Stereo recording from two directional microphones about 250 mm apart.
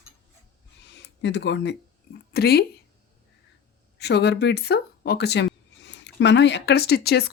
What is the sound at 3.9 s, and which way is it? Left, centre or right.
Speech, left.